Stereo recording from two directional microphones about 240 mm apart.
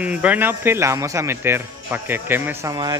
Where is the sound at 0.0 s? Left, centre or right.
Centre.